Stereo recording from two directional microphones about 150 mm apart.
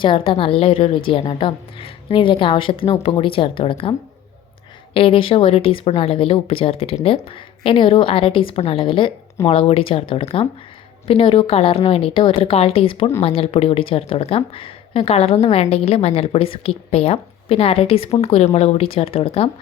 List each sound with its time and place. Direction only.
0.0 s speech: 35° left (ahead or behind)
4.9 s speech: 35° left (ahead or behind)